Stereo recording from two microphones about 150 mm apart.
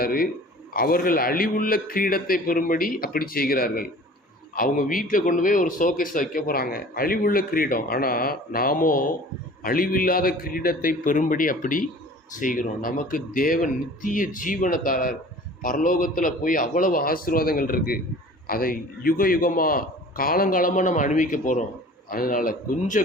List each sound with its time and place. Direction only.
0.0 s a man's voice: 80° left
4.5 s speech: 70° left (ahead or behind)